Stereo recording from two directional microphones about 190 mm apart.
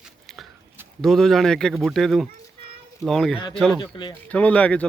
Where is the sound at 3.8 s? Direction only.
25° left (ahead or behind).